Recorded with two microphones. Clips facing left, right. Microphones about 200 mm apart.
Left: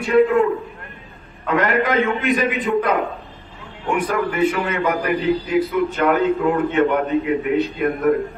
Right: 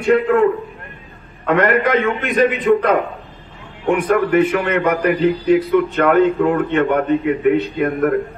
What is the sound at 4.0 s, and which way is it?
Speech, 50° right (ahead or behind).